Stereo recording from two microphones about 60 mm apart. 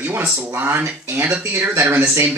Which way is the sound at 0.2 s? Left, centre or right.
Right.